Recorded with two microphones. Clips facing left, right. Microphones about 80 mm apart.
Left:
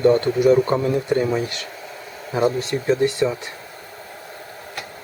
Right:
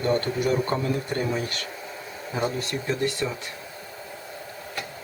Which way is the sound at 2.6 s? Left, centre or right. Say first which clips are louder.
Left 8 dB; left.